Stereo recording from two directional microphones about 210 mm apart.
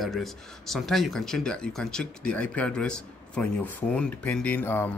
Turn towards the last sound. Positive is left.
turn(degrees=10)  # may be behind; listen again after turning